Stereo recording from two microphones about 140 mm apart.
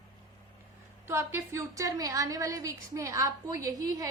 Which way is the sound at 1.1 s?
20° right (ahead or behind).